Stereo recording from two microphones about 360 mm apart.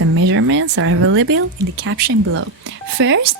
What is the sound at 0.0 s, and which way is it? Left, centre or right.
Speech, right.